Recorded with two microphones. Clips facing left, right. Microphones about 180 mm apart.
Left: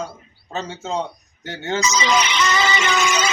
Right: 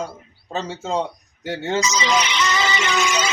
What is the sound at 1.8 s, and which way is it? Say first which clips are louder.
Music: left 1 dB; 50° left (ahead or behind).